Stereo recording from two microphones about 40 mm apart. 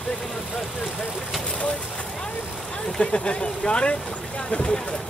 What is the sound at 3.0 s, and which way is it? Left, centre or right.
Speech, left.